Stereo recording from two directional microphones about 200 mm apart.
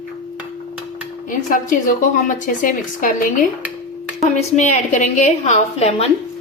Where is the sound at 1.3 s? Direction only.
40° left (ahead or behind).